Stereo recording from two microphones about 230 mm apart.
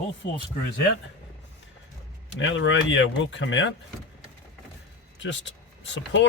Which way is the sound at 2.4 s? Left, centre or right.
Left.